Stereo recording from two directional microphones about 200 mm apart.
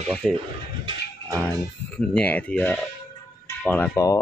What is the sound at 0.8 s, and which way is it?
Music, 20° right (ahead or behind).